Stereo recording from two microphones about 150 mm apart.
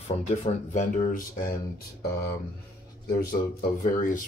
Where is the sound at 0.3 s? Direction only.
50° left (ahead or behind).